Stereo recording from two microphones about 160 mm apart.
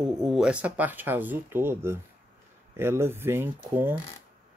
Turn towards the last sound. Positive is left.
turn(degrees=-10)  # may be behind; listen again after turning